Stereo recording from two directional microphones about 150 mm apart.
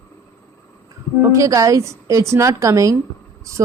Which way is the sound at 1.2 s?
20° right (ahead or behind).